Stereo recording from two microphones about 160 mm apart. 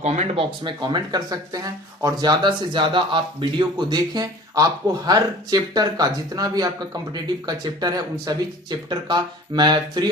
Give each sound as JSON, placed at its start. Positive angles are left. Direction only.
{"t": 0.0, "sound": "speech", "side_deg": -45}
{"t": 0.6, "sound": "speech", "side_deg": -30}